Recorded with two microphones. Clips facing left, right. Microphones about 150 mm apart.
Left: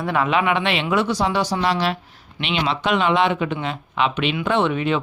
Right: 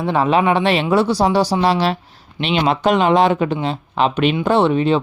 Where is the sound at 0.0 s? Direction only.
30° right (ahead or behind).